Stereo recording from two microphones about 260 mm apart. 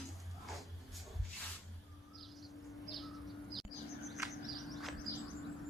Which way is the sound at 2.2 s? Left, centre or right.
Centre.